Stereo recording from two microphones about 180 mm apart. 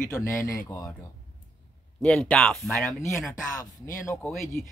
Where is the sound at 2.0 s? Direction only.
5° left (ahead or behind).